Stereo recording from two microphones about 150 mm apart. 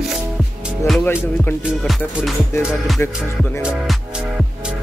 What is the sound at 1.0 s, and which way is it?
Speech, 10° left (ahead or behind).